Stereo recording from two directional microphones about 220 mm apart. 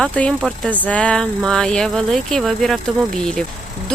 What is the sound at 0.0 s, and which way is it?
Speech, 5° left (ahead or behind).